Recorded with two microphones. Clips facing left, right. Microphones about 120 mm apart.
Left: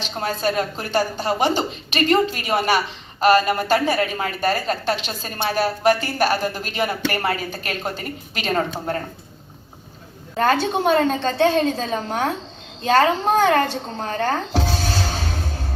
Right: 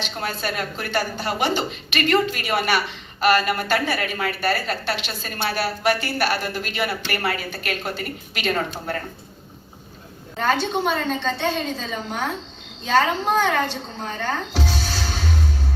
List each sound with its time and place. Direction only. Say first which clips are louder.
0.0 s a woman's voice: left 4 dB; 35° left (ahead or behind)
10.3 s a woman's voice: left 3 dB; 50° left (ahead or behind)
14.0 s music: left 4 dB; 45° left (ahead or behind)